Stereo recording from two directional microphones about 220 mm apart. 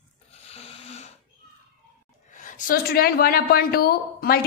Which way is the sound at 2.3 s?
35° left (ahead or behind).